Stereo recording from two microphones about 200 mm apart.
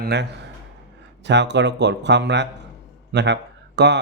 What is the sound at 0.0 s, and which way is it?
A man's voice, 55° right (ahead or behind).